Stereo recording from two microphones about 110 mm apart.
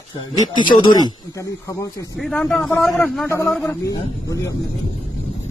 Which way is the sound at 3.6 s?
30° left (ahead or behind).